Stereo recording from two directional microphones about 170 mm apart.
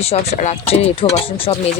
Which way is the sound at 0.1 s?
35° left (ahead or behind).